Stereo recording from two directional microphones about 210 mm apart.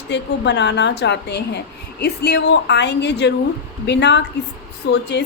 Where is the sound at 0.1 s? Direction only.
55° left (ahead or behind).